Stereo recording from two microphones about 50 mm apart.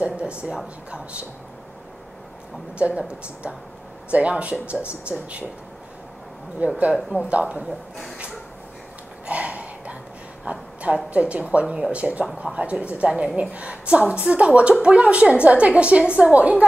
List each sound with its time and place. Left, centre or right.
0.0 s speech: right
2.8 s speech: right
6.6 s speech: right
9.2 s a sound: right
11.1 s speech: right